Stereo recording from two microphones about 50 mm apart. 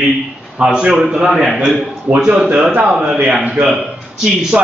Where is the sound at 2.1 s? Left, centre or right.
Right.